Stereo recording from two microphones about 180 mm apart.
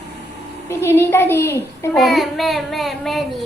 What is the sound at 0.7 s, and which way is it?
A woman's voice, 15° left (ahead or behind).